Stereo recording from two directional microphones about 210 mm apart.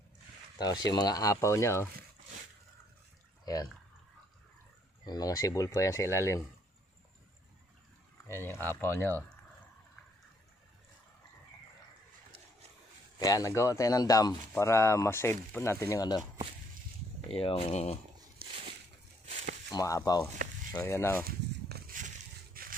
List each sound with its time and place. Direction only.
0.9 s speech: 20° left (ahead or behind)
3.4 s speech: 15° left (ahead or behind)
5.0 s speech: 20° left (ahead or behind)
8.3 s speech: 10° left (ahead or behind)
13.1 s speech: 15° left (ahead or behind)
17.2 s speech: 25° left (ahead or behind)
18.4 s a sound: 45° right (ahead or behind)
19.2 s a sound: 35° right (ahead or behind)
19.7 s speech: 15° left (ahead or behind)
21.2 s a sound: 45° right (ahead or behind)